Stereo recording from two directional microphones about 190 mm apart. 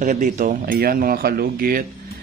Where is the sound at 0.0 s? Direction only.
45° right (ahead or behind).